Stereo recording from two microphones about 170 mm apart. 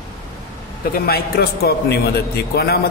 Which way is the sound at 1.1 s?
65° left (ahead or behind).